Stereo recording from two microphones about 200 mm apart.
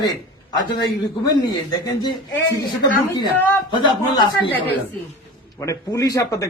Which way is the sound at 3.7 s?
25° left (ahead or behind).